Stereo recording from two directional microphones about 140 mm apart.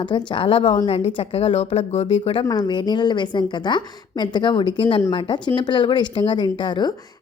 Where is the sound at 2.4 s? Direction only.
30° left (ahead or behind).